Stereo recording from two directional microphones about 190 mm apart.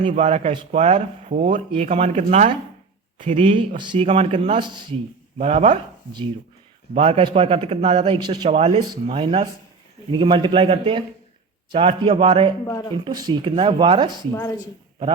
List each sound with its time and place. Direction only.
0.2 s speech: 35° right (ahead or behind)
5.4 s speech: 35° right (ahead or behind)
12.6 s speech: 20° left (ahead or behind)
12.9 s speech: 20° right (ahead or behind)
14.3 s speech: 15° left (ahead or behind)